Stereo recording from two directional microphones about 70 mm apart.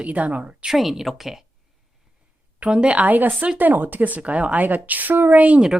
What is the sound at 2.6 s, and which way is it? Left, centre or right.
A woman's voice, centre.